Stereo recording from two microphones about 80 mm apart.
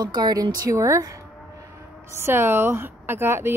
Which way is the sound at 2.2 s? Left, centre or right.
Right.